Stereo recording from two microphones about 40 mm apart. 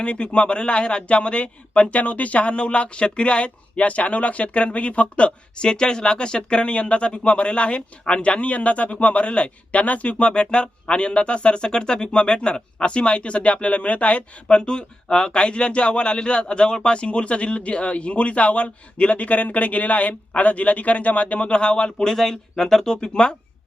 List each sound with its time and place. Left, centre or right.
0.0 s speech: left
14.4 s speech: left
22.1 s speech: centre